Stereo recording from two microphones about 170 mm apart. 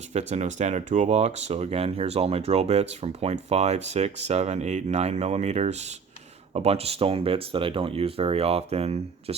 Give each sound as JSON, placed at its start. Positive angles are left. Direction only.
{"t": 0.1, "sound": "speech", "side_deg": -40}